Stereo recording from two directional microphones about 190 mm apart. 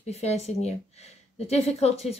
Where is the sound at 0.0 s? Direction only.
35° left (ahead or behind).